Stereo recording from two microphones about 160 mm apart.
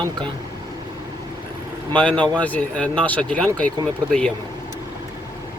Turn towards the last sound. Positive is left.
turn(degrees=5)  # may be behind; listen again after turning